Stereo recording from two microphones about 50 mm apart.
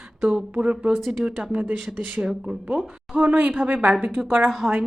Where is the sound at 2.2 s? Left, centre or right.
Centre.